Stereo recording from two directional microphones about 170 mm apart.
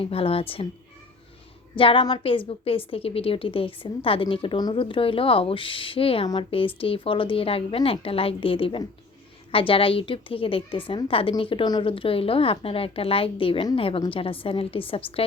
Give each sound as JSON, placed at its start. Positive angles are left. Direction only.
{"t": 0.0, "sound": "a woman's voice", "side_deg": 35}
{"t": 1.7, "sound": "a woman's voice", "side_deg": 30}